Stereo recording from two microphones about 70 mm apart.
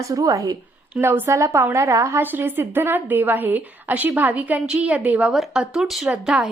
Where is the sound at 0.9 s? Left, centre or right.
Centre.